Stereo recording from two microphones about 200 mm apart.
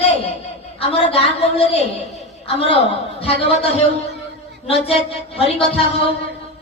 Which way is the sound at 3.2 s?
30° left (ahead or behind).